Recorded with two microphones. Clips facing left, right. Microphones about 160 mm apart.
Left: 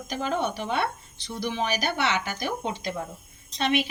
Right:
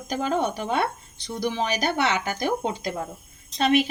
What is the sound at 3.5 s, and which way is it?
Speech, 45° right (ahead or behind).